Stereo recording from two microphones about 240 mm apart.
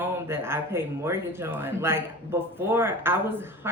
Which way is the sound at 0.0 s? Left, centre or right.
Centre.